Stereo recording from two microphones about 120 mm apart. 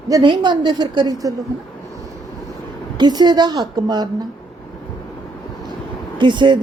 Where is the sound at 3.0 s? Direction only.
35° right (ahead or behind).